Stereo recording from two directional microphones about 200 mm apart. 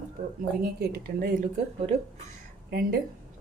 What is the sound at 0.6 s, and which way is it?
Speech, 50° right (ahead or behind).